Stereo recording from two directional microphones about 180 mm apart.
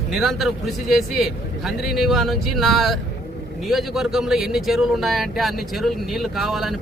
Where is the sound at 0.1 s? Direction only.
Centre (ahead or behind).